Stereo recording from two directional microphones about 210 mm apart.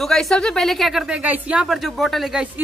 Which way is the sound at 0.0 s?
Centre (ahead or behind).